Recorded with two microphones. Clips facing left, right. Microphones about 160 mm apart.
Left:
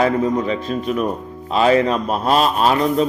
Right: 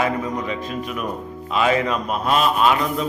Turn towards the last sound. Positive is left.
turn(degrees=35)  # may be behind; listen again after turning